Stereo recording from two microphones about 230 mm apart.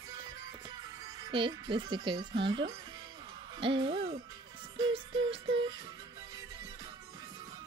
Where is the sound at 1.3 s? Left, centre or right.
Right.